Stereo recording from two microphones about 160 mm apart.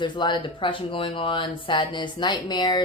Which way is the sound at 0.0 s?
30° left (ahead or behind).